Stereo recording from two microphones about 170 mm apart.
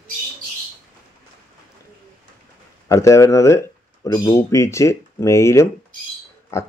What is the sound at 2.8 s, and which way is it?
Speech, 15° left (ahead or behind).